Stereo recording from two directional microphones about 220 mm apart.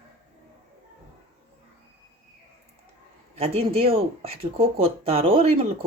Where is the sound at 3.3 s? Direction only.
25° right (ahead or behind).